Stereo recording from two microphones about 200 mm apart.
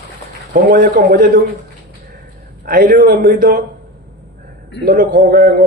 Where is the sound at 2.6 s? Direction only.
45° right (ahead or behind).